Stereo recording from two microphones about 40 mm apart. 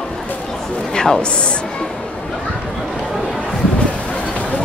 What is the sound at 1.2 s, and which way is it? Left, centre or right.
Speech, left.